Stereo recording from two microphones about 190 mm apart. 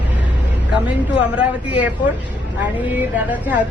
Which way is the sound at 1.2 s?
5° right (ahead or behind).